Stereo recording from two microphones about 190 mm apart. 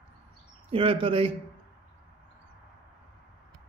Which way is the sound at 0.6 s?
30° right (ahead or behind).